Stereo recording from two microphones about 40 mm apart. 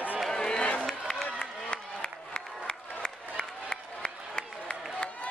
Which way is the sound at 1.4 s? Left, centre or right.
Left.